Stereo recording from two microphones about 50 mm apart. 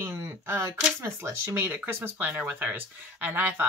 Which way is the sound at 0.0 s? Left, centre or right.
Right.